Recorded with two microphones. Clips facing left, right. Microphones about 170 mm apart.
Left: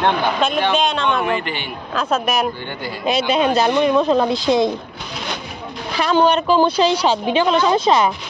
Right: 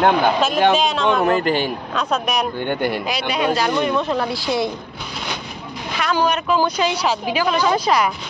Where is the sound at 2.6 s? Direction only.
60° right (ahead or behind).